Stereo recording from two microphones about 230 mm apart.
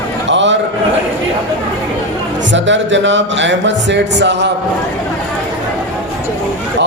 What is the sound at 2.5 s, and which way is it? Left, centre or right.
A man's voice, right.